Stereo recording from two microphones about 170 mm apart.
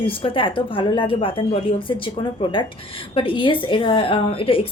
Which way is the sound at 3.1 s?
30° left (ahead or behind).